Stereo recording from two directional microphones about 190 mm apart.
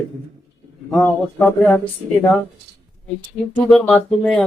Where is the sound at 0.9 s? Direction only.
10° left (ahead or behind).